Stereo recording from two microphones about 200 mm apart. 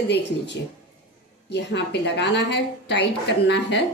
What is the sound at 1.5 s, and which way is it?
A woman's voice, 60° left (ahead or behind).